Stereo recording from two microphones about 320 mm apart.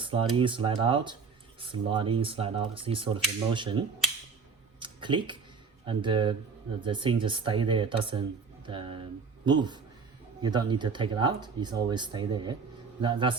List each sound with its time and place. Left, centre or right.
0.0 s speech: centre
4.8 s a sound: centre
5.8 s speech: centre